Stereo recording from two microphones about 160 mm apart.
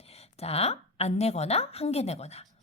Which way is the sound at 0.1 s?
40° left (ahead or behind).